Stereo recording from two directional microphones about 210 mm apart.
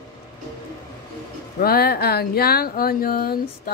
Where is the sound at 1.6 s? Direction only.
45° left (ahead or behind).